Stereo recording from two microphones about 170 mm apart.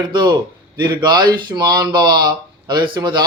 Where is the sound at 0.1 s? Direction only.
25° right (ahead or behind).